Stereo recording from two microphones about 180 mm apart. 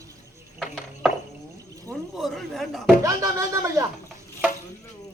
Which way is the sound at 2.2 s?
Centre (ahead or behind).